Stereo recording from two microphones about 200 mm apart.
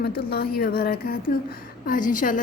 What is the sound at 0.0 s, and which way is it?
A woman's voice, 50° left (ahead or behind).